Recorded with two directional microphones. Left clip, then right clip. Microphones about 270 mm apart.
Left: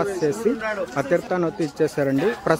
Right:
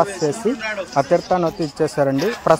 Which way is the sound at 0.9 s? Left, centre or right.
Centre.